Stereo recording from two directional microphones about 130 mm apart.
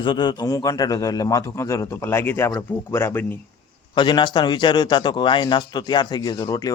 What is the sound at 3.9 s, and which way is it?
A man's voice, 35° left (ahead or behind).